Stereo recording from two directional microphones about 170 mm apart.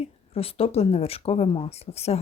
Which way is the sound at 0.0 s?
35° left (ahead or behind).